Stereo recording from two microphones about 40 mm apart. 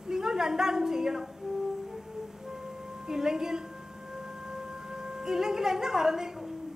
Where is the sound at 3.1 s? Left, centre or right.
Centre.